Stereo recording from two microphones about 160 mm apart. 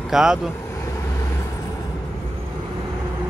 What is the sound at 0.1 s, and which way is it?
Speech, 5° right (ahead or behind).